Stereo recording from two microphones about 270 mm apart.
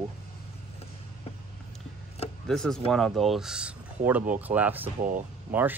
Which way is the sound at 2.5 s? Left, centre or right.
Centre.